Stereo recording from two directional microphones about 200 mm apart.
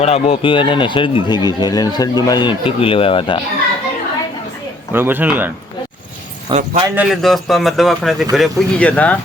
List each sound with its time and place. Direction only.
0.0 s speech: 30° left (ahead or behind)
4.9 s a man's voice: 10° right (ahead or behind)
6.5 s speech: 35° right (ahead or behind)
6.8 s a man's voice: 5° right (ahead or behind)